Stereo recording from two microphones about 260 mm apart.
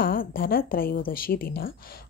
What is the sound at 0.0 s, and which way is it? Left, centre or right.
A woman's voice, left.